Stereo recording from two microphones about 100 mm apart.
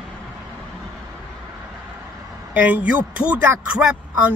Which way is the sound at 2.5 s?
15° right (ahead or behind).